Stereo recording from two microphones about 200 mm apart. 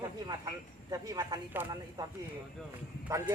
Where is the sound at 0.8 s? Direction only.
15° right (ahead or behind).